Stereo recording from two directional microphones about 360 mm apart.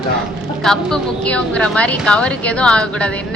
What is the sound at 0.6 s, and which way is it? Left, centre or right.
A woman's voice, centre.